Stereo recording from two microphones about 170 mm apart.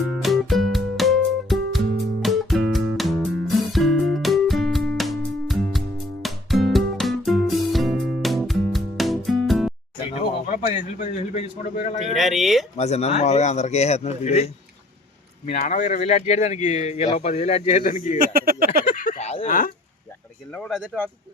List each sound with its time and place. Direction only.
0.2 s music: centre (ahead or behind)
10.2 s a sound: 45° left (ahead or behind)
11.0 s a man's voice: 35° left (ahead or behind)
12.1 s speech: centre (ahead or behind)
12.7 s a man's voice: 40° left (ahead or behind)
18.2 s speech: 60° right (ahead or behind)
18.9 s a sound: 50° left (ahead or behind)
19.5 s speech: 55° left (ahead or behind)
20.5 s speech: 5° left (ahead or behind)